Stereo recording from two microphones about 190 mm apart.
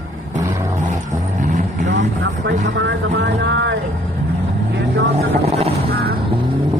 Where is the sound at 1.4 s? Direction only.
40° right (ahead or behind).